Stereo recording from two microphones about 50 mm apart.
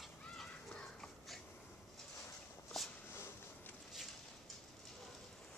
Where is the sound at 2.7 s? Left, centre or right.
Centre.